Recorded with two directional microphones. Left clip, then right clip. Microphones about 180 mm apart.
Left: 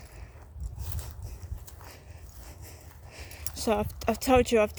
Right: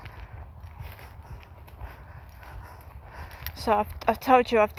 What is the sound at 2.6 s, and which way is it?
Horse, 75° left (ahead or behind).